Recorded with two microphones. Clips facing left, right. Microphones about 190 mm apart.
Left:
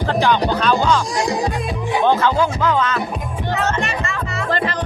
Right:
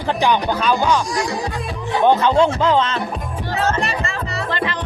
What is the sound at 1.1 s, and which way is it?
Music, 20° left (ahead or behind).